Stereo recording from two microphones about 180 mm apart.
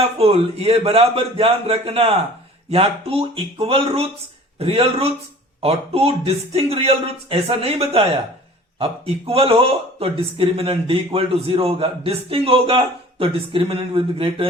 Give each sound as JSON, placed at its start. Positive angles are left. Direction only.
{"t": 0.2, "sound": "speech", "side_deg": -35}